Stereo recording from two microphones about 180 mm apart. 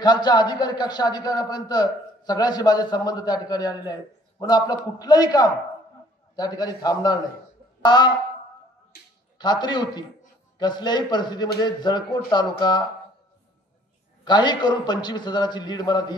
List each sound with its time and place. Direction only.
0.0 s a man's voice: 25° left (ahead or behind)
9.4 s a man's voice: 25° left (ahead or behind)
14.2 s a man's voice: 25° left (ahead or behind)